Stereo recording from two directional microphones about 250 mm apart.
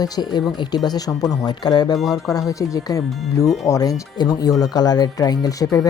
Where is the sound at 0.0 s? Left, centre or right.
Centre.